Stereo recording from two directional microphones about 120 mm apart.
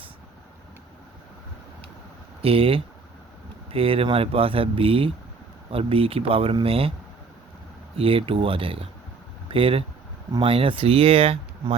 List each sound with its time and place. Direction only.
2.4 s speech: 50° right (ahead or behind)
7.9 s speech: 50° right (ahead or behind)